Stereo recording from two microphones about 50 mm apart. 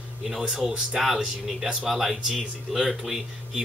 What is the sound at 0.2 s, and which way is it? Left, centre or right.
Speech, centre.